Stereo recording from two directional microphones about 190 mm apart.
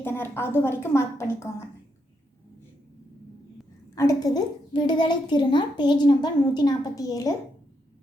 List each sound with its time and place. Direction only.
0.0 s a woman's voice: 10° left (ahead or behind)
3.9 s a child's voice: 20° left (ahead or behind)